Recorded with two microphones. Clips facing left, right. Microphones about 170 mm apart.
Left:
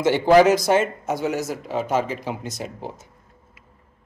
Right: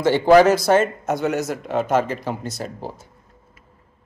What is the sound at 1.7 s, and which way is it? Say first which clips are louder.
Speech: right 3 dB; 55° right (ahead or behind).